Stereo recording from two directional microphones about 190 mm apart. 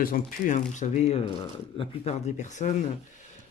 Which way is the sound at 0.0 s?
45° left (ahead or behind).